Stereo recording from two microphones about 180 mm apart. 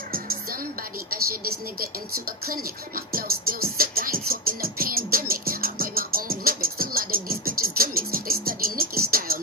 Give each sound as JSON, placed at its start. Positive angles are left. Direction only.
{"t": 0.1, "sound": "music", "side_deg": -55}
{"t": 1.1, "sound": "speech", "side_deg": -55}
{"t": 3.1, "sound": "music", "side_deg": -55}